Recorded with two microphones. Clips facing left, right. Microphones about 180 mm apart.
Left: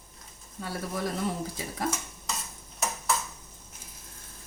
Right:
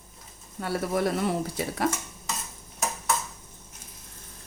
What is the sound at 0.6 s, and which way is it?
Speech, 70° right (ahead or behind).